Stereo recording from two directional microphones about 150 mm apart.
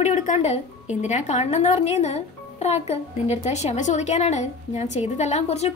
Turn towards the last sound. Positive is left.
turn(degrees=45)  # may be behind; listen again after turning